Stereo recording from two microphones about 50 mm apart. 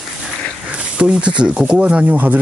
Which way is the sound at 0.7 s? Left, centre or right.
Right.